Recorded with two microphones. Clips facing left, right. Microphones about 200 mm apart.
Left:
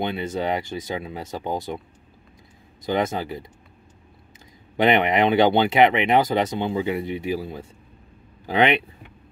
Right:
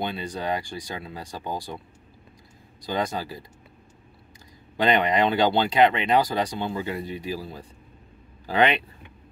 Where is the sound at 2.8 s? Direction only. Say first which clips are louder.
Left 4 dB; 20° left (ahead or behind).